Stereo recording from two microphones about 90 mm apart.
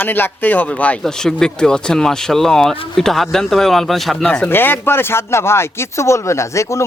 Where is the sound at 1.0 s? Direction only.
5° left (ahead or behind).